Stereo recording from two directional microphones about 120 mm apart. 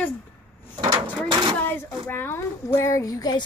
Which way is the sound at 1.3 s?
35° right (ahead or behind).